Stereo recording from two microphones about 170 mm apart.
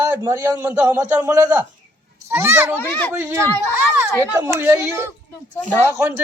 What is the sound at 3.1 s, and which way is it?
Speech, 15° right (ahead or behind).